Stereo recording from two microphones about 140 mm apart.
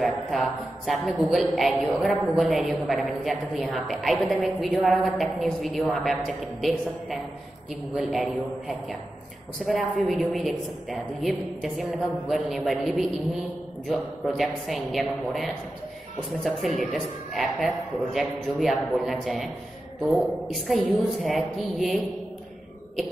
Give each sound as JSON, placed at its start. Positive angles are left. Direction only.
{"t": 0.0, "sound": "a woman's voice", "side_deg": 0}